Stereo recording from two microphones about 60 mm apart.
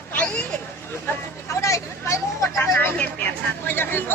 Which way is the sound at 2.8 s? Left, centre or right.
Left.